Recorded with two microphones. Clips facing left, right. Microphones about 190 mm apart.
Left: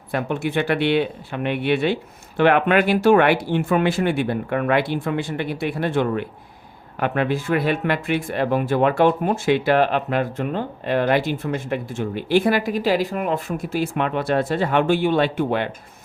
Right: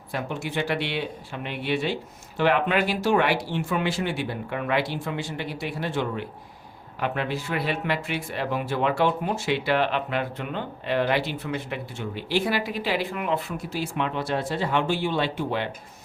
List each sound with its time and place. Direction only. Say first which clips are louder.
0.1 s speech: left 7 dB; 60° left (ahead or behind)